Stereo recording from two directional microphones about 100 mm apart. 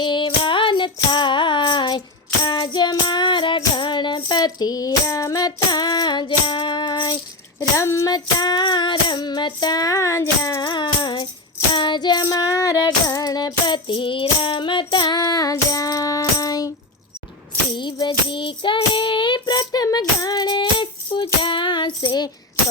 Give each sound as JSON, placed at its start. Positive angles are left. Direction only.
{"t": 0.0, "sound": "music", "side_deg": 55}
{"t": 3.8, "sound": "child singing", "side_deg": 50}
{"t": 7.8, "sound": "child singing", "side_deg": 30}
{"t": 8.1, "sound": "child singing", "side_deg": 45}
{"t": 18.3, "sound": "child singing", "side_deg": 55}